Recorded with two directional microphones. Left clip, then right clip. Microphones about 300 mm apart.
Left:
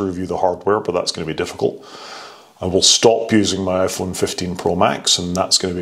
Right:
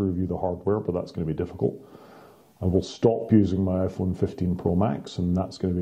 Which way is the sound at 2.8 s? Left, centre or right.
Centre.